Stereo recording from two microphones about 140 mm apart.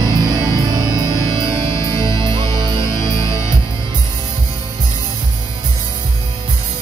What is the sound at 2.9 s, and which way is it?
Music, 20° left (ahead or behind).